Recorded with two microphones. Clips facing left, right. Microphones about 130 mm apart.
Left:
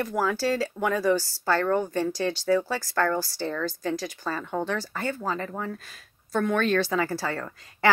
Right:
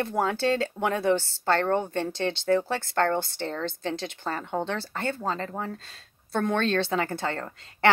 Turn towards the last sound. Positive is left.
turn(degrees=-30)  # may be behind; listen again after turning